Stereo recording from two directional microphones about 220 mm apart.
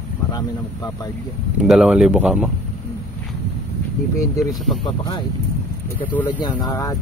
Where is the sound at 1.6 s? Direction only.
Centre (ahead or behind).